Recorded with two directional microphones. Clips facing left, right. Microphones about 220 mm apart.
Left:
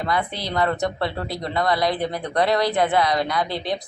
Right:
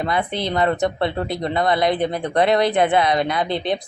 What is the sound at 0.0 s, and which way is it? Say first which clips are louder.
Speech: right 3 dB; 20° right (ahead or behind).